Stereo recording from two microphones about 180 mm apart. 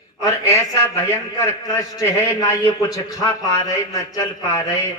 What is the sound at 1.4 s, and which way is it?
A man's voice, 20° left (ahead or behind).